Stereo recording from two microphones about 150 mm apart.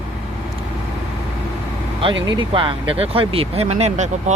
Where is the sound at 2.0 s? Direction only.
35° right (ahead or behind).